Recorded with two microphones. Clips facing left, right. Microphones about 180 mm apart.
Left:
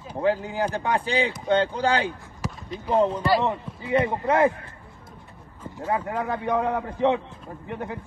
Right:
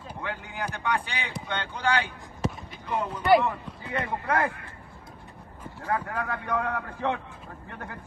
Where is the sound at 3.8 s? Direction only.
15° left (ahead or behind).